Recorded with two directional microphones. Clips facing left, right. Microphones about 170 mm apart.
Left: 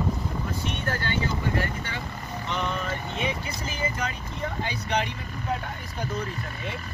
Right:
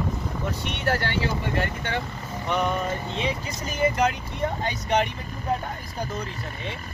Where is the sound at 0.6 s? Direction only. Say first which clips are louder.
Right 7 dB; 75° right (ahead or behind).